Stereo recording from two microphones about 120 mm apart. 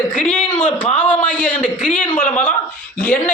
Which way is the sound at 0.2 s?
10° left (ahead or behind).